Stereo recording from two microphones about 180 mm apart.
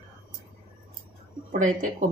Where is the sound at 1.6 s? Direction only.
45° right (ahead or behind).